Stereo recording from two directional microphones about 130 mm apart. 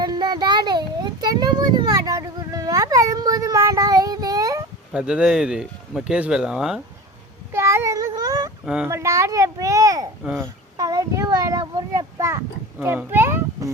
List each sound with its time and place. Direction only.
0.0 s child singing: 30° right (ahead or behind)
4.9 s speech: 5° right (ahead or behind)
7.5 s child singing: 20° right (ahead or behind)
8.6 s a child's voice: 5° right (ahead or behind)
8.9 s a child's voice: 20° right (ahead or behind)
11.9 s a sound: 20° right (ahead or behind)
12.8 s a child's voice: 15° right (ahead or behind)